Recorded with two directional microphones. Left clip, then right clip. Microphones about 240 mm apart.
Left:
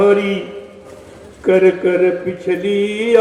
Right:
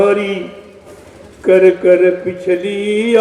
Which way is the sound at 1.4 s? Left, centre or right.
Right.